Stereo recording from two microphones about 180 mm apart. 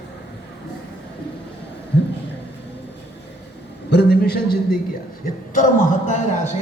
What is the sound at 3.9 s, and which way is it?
Speech, 65° left (ahead or behind).